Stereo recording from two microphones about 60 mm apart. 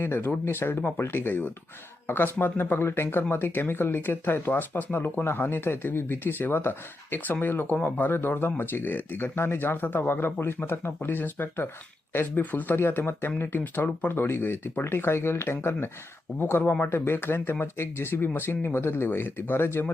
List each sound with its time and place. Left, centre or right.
0.0 s speech: left